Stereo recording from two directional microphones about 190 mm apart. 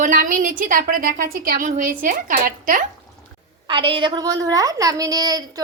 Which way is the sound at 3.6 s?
25° right (ahead or behind).